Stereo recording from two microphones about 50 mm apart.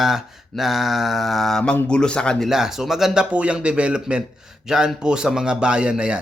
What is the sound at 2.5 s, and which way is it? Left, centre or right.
Speech, centre.